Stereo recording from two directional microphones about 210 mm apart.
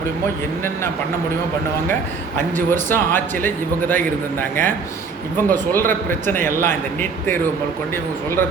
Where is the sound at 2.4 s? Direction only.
10° left (ahead or behind).